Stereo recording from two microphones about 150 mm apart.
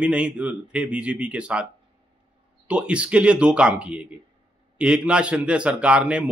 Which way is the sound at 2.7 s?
5° right (ahead or behind).